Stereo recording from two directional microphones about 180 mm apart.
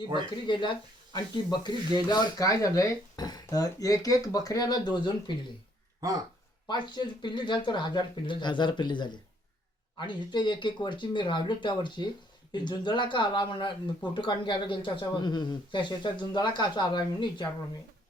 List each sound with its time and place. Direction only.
0.4 s speech: 25° left (ahead or behind)
6.7 s speech: 25° left (ahead or behind)